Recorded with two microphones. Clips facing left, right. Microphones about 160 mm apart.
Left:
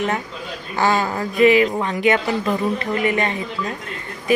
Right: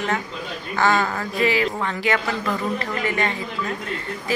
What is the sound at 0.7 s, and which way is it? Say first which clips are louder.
A woman's voice: left 1 dB; 15° left (ahead or behind).